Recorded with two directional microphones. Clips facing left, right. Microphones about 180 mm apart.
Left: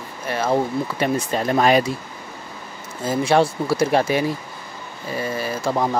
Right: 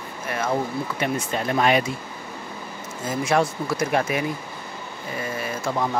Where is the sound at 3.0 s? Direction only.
30° left (ahead or behind).